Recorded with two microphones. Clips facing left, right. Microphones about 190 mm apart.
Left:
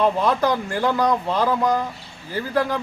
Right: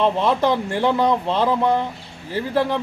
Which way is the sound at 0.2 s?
25° right (ahead or behind).